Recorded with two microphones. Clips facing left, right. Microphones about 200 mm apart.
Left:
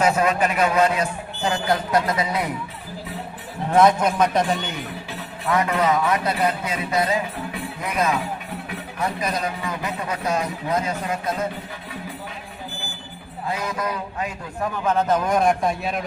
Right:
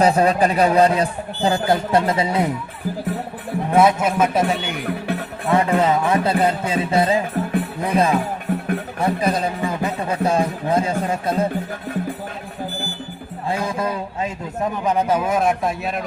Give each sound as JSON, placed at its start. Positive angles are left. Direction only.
{"t": 0.0, "sound": "a man's voice", "side_deg": -35}
{"t": 3.8, "sound": "a man's voice", "side_deg": -5}
{"t": 5.5, "sound": "a man's voice", "side_deg": -30}
{"t": 8.5, "sound": "music", "side_deg": -50}
{"t": 9.0, "sound": "a man's voice", "side_deg": -30}
{"t": 13.5, "sound": "a man's voice", "side_deg": -30}